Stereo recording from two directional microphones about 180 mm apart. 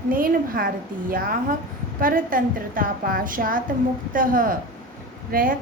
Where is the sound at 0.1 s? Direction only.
50° right (ahead or behind).